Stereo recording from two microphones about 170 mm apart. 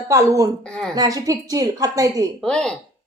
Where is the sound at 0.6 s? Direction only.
5° left (ahead or behind).